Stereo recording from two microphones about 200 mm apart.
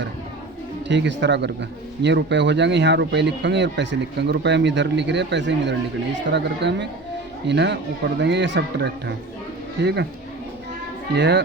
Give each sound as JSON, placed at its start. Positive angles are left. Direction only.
{"t": 0.9, "sound": "speech", "side_deg": -60}
{"t": 11.1, "sound": "speech", "side_deg": -60}